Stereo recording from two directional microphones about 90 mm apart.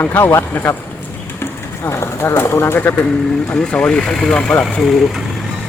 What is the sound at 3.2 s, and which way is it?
Speech, 5° left (ahead or behind).